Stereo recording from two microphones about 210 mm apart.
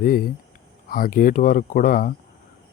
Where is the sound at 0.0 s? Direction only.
45° left (ahead or behind).